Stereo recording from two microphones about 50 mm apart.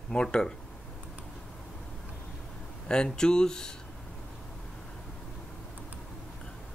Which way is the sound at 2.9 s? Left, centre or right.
Centre.